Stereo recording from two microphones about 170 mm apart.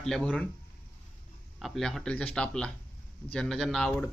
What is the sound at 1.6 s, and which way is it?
A man's voice, centre (ahead or behind).